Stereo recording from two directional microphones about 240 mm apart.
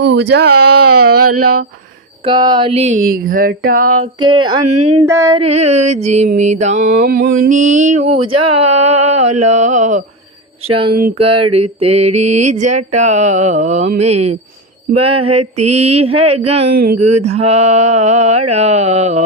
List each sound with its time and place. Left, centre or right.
0.0 s speech: right
0.9 s a sound: right
2.2 s mantra: centre; by 3.8 s right
3.9 s mantra: right
4.9 s a sound: centre
5.4 s mantra: right